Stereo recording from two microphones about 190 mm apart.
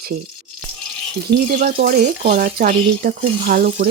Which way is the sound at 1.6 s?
50° right (ahead or behind).